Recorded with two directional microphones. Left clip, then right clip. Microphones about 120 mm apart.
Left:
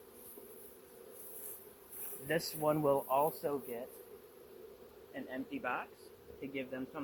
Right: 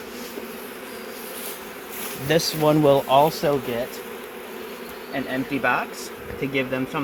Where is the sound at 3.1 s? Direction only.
40° right (ahead or behind).